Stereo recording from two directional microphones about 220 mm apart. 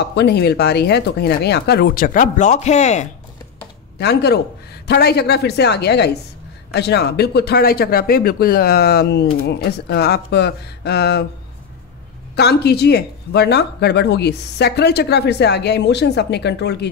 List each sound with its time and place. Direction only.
0.0 s speech: 50° left (ahead or behind); by 3.1 s 30° left (ahead or behind)
4.0 s speech: 45° left (ahead or behind)
12.4 s speech: 50° left (ahead or behind)